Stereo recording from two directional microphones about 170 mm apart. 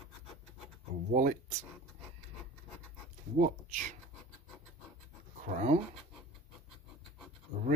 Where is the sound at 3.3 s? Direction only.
45° right (ahead or behind).